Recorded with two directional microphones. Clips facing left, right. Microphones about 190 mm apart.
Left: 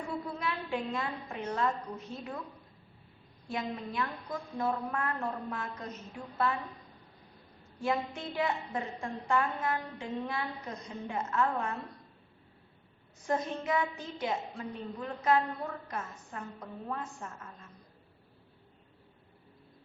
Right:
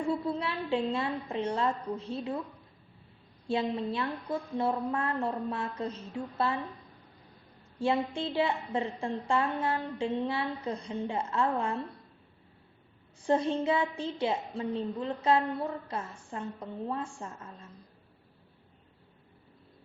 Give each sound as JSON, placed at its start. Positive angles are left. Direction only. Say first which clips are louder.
{"t": 0.3, "sound": "a woman's voice", "louder": "right 4 dB", "side_deg": -30}
{"t": 3.5, "sound": "a woman's voice", "louder": "right 6 dB", "side_deg": -30}
{"t": 7.8, "sound": "a woman's voice", "louder": "right 4 dB", "side_deg": -30}
{"t": 13.2, "sound": "a woman's voice", "louder": "right 6 dB", "side_deg": -30}